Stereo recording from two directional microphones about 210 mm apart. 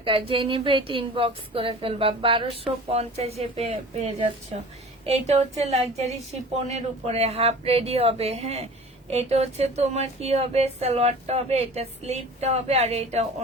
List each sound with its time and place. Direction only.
0.0 s a woman's voice: 25° right (ahead or behind)